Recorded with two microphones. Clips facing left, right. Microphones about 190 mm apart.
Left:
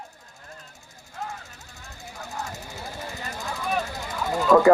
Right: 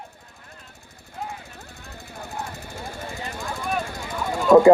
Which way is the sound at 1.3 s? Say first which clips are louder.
Right 2 dB; 55° right (ahead or behind).